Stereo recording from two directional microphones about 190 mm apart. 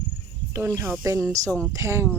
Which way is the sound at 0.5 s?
15° right (ahead or behind).